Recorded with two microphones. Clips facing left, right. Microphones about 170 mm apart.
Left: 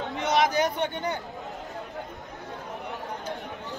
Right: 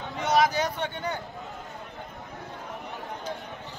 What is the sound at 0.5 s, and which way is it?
Speech, 20° left (ahead or behind).